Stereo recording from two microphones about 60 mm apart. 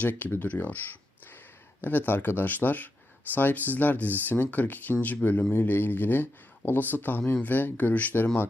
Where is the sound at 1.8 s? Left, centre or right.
Left.